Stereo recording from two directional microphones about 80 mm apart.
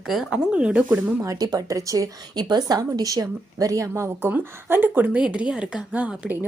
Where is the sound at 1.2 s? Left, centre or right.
Right.